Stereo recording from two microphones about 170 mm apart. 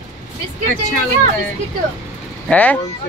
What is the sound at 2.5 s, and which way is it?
Speech, 10° left (ahead or behind).